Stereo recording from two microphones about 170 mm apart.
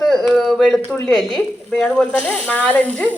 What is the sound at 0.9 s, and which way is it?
Speech, 5° left (ahead or behind).